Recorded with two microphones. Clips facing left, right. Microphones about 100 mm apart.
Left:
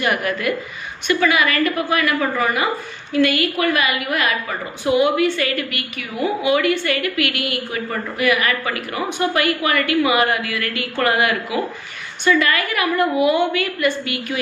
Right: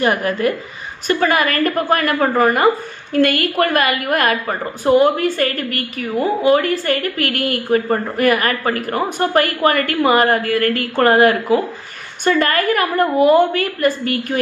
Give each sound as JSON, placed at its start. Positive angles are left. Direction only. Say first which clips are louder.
{"t": 0.0, "sound": "a woman's voice", "louder": "right 4 dB", "side_deg": -35}